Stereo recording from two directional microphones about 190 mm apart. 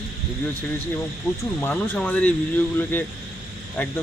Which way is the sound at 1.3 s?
15° left (ahead or behind).